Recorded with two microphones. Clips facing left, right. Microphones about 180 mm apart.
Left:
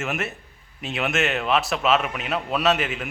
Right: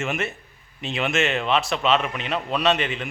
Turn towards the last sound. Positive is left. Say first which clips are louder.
# even
turn(degrees=5)  # may be behind; listen again after turning